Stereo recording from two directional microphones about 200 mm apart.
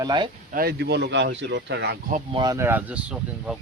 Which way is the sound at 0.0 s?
20° right (ahead or behind).